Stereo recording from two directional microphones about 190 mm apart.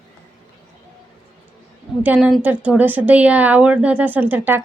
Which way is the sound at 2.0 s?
5° right (ahead or behind).